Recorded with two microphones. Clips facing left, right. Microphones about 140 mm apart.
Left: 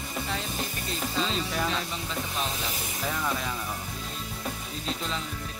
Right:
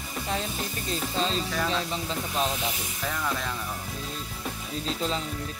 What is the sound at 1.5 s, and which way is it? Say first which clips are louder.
Speech: right 1 dB; 5° left (ahead or behind).